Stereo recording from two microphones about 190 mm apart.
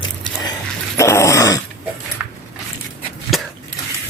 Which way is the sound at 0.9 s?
15° left (ahead or behind).